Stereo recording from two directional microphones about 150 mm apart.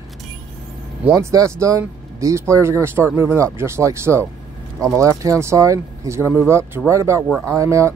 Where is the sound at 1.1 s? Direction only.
20° right (ahead or behind).